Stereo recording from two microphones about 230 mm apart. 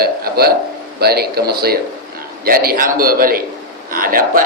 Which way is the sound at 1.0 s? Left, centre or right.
Right.